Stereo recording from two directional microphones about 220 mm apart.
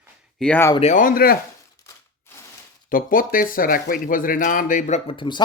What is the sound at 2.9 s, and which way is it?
Speech, 40° left (ahead or behind).